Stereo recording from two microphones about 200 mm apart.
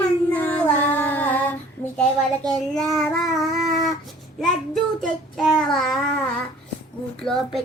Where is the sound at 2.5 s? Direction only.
Centre (ahead or behind).